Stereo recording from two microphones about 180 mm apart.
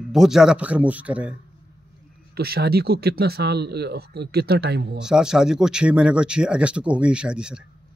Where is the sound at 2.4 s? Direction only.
60° right (ahead or behind).